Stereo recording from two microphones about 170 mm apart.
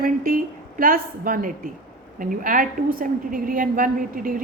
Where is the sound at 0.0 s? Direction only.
55° right (ahead or behind).